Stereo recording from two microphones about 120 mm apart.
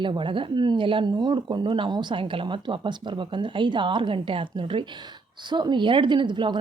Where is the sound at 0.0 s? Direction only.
45° right (ahead or behind).